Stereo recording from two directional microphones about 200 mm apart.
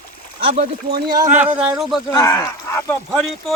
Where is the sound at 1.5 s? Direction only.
5° right (ahead or behind).